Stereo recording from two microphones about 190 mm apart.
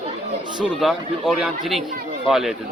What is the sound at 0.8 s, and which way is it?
Speech, centre (ahead or behind).